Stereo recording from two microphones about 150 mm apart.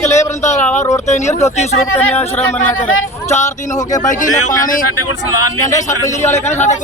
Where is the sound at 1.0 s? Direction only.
50° left (ahead or behind).